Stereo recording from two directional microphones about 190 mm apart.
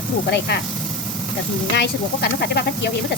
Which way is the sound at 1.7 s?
60° left (ahead or behind).